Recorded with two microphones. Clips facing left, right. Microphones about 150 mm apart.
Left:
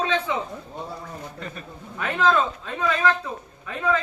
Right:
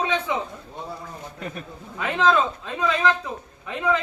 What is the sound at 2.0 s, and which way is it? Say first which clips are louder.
A man's voice: right 1 dB; 15° right (ahead or behind).